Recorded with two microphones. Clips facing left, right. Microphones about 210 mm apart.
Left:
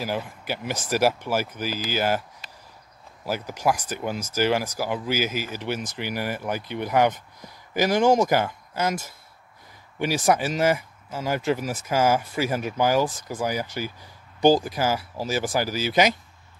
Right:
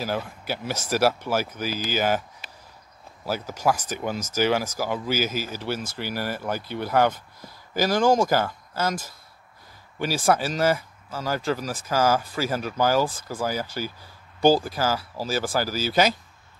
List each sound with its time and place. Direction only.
0.0 s speech: 10° left (ahead or behind)
3.3 s speech: 10° left (ahead or behind)
5.3 s speech: 40° right (ahead or behind)
5.6 s speech: 15° left (ahead or behind)